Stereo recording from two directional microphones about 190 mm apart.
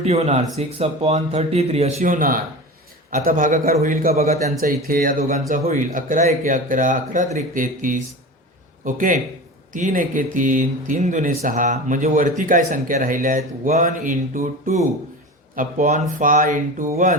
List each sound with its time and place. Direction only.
0.0 s speech: 35° right (ahead or behind)
4.6 s a man's voice: 50° right (ahead or behind)